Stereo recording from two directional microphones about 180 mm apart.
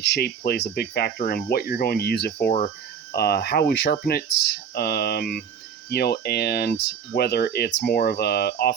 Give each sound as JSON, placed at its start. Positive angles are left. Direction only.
{"t": 0.0, "sound": "speech", "side_deg": 65}